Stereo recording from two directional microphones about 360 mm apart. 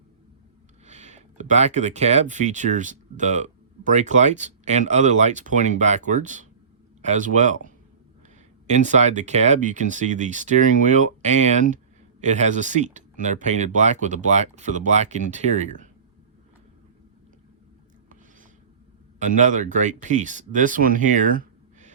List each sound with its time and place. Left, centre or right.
0.9 s speech: centre
19.2 s speech: right